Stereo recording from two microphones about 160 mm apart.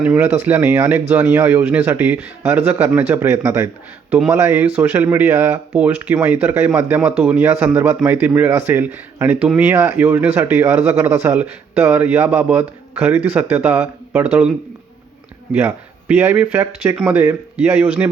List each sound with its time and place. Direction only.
0.0 s speech: 5° right (ahead or behind)
15.5 s speech: 15° right (ahead or behind)